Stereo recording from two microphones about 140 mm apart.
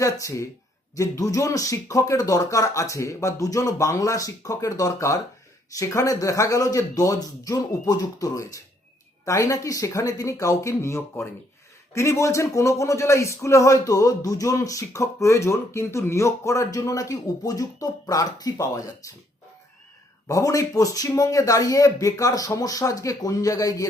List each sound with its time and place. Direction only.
0.0 s a man's voice: 20° left (ahead or behind)
20.2 s a man's voice: 25° left (ahead or behind)